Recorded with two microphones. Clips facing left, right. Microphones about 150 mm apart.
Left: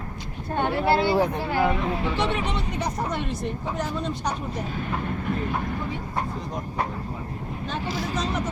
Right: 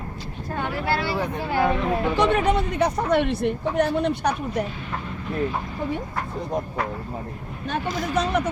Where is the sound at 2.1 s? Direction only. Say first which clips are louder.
Right 6 dB; 45° right (ahead or behind); by 4.6 s 65° right (ahead or behind).